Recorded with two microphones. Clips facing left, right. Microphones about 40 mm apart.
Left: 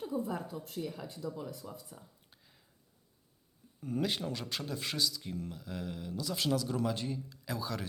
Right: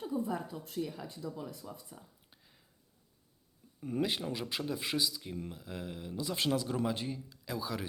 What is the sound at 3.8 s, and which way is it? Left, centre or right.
Speech, centre.